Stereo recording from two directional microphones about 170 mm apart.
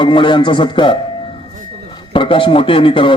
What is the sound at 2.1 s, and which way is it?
A man's voice, 30° left (ahead or behind).